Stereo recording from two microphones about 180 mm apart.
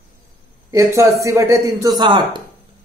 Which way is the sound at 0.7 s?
15° right (ahead or behind).